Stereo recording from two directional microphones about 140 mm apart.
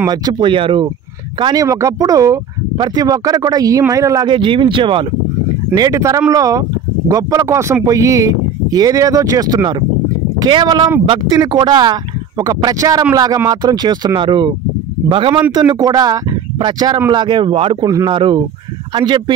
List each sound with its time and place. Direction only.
0.1 s speech: 30° right (ahead or behind)
1.4 s speech: 25° right (ahead or behind)
5.8 s speech: 25° right (ahead or behind)
17.8 s speech: 30° right (ahead or behind)